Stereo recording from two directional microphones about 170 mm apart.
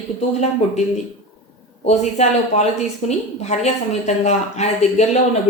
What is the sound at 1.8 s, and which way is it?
A woman's voice, 40° left (ahead or behind).